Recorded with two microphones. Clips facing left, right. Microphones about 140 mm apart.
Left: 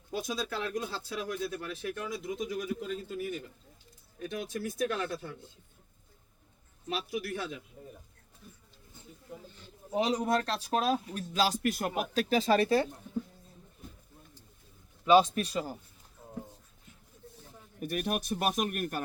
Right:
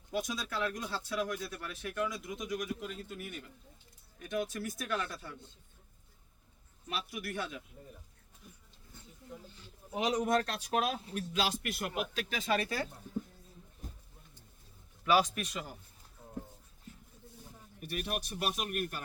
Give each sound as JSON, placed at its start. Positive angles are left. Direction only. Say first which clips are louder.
{"t": 0.1, "sound": "speech", "louder": "left 2 dB", "side_deg": 30}
{"t": 6.8, "sound": "speech", "louder": "left 5 dB", "side_deg": 30}
{"t": 9.9, "sound": "speech", "louder": "left 2 dB", "side_deg": 30}
{"t": 15.0, "sound": "speech", "louder": "left 6 dB", "side_deg": 25}
{"t": 16.9, "sound": "a sound", "louder": "right 7 dB", "side_deg": -35}
{"t": 17.7, "sound": "speech", "louder": "left 5 dB", "side_deg": 50}